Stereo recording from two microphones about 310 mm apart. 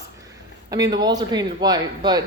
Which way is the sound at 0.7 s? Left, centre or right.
Centre.